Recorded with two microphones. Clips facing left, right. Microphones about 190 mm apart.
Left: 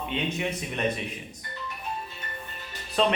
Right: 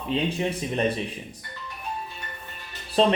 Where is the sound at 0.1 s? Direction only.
35° right (ahead or behind).